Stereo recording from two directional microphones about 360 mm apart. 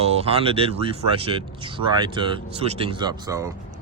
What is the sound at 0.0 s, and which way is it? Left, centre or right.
Speech, centre.